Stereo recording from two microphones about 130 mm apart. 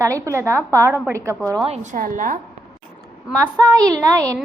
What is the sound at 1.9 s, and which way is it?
Speech, 90° right.